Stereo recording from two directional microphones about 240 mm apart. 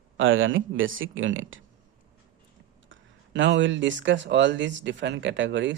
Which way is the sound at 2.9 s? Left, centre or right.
Right.